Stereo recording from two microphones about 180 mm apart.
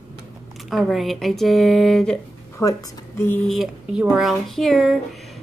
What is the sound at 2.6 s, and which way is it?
Speech, 15° left (ahead or behind).